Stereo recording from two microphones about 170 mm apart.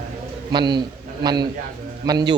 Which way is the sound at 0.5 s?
25° right (ahead or behind).